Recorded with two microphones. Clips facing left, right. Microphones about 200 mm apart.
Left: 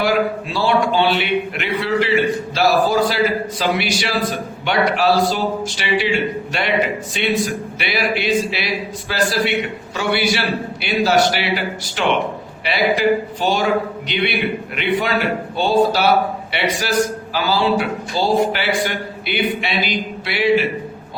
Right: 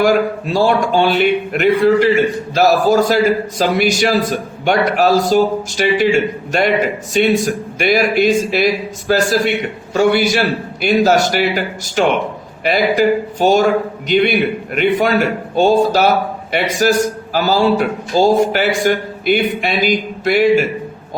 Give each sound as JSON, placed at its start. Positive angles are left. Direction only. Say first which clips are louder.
{"t": 0.0, "sound": "speech", "louder": "right 4 dB", "side_deg": -45}